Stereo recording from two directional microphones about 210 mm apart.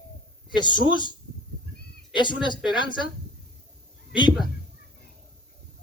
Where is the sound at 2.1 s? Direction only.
20° left (ahead or behind).